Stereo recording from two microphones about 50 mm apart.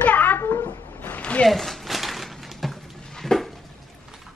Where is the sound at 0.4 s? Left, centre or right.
Left.